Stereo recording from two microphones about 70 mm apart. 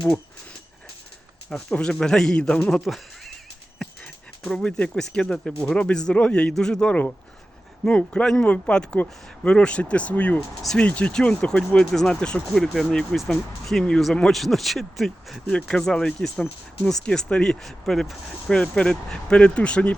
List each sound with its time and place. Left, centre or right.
1.7 s speech: centre
2.8 s a sound: centre
4.4 s speech: centre
18.5 s speech: centre